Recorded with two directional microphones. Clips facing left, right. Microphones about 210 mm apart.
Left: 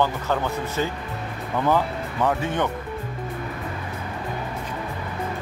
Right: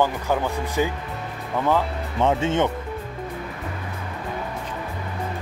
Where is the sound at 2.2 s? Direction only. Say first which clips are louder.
Right 3 dB; 25° right (ahead or behind).